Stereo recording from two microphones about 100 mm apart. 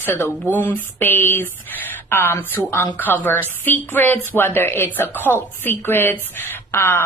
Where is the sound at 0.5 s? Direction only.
20° left (ahead or behind).